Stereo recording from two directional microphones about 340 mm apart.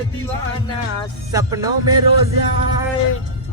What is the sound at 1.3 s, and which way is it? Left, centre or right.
Speech, centre.